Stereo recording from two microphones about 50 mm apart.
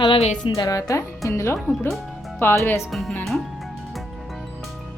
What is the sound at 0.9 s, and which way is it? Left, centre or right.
Speech, left.